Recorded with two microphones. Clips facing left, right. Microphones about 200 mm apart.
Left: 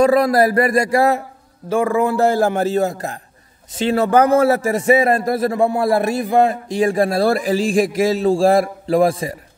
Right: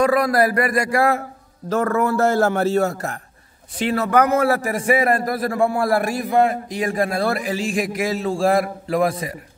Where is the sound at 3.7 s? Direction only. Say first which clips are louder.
Left 3 dB; 25° left (ahead or behind).